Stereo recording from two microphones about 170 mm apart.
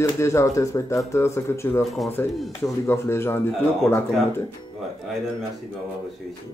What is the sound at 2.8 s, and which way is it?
Speech, 15° left (ahead or behind).